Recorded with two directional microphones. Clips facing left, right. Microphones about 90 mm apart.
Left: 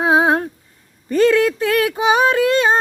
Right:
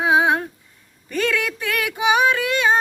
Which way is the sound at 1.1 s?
35° left (ahead or behind).